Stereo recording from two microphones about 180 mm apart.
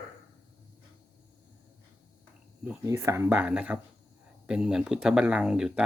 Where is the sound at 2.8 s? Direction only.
15° right (ahead or behind).